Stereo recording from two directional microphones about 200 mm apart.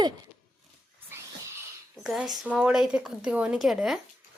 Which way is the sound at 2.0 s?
5° right (ahead or behind).